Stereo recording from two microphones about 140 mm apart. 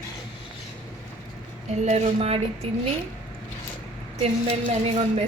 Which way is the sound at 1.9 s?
45° right (ahead or behind).